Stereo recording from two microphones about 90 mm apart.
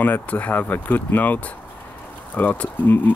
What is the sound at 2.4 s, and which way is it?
Speech, 15° left (ahead or behind).